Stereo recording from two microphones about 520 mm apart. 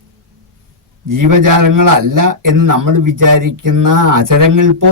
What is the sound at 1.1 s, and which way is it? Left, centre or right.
A man's voice, right.